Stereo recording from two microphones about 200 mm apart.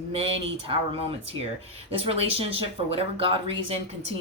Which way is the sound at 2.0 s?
30° right (ahead or behind).